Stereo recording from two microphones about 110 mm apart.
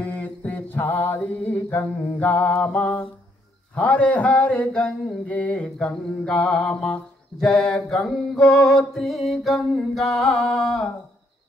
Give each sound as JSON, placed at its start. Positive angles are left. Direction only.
{"t": 0.0, "sound": "mantra", "side_deg": 15}
{"t": 3.7, "sound": "a sound", "side_deg": 15}
{"t": 8.4, "sound": "music", "side_deg": 30}
{"t": 8.9, "sound": "music", "side_deg": 0}